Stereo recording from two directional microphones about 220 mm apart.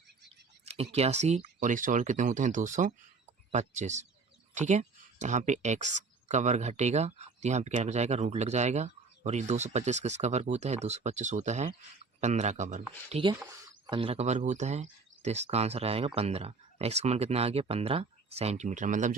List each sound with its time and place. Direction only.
0.6 s speech: 30° right (ahead or behind)